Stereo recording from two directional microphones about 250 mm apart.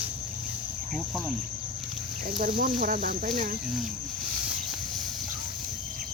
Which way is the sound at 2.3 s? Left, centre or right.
Right.